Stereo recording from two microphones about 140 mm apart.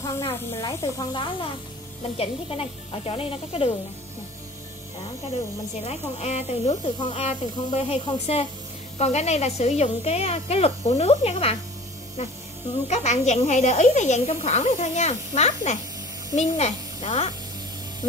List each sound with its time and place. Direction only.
0.0 s speech: 20° left (ahead or behind); by 3.7 s 40° left (ahead or behind)
5.9 s speech: 50° left (ahead or behind)
12.8 s speech: 55° left (ahead or behind)